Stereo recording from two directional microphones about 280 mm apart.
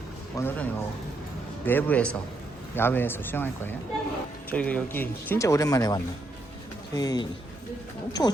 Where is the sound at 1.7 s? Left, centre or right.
Centre.